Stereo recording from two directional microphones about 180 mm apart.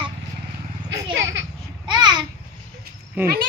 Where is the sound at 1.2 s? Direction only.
90° right.